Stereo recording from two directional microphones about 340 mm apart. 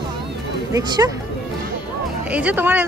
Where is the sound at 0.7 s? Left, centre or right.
Centre.